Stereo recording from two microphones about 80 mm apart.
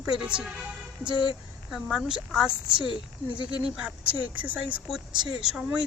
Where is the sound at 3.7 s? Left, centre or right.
Centre.